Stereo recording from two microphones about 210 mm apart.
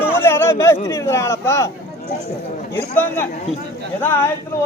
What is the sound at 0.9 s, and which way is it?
Speech, 15° left (ahead or behind).